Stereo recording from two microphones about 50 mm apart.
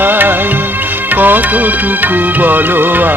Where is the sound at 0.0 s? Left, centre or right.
Right.